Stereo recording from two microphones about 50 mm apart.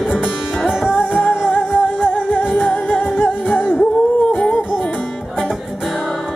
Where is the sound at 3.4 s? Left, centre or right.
Centre.